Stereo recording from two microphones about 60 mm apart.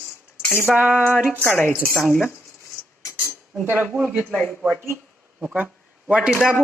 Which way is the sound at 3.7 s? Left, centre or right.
Right.